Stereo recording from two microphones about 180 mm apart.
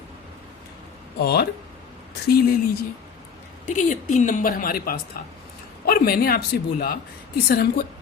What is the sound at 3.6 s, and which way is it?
A woman's voice, 45° left (ahead or behind).